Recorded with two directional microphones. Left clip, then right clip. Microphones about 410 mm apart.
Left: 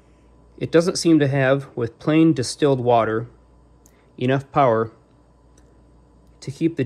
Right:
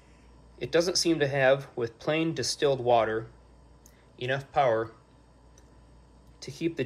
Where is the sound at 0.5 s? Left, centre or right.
Centre.